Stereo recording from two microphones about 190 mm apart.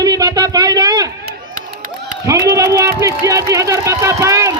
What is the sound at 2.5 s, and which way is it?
A man's voice, 15° right (ahead or behind).